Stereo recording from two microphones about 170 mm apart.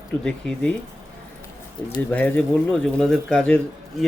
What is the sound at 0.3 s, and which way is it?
Speech, 5° left (ahead or behind).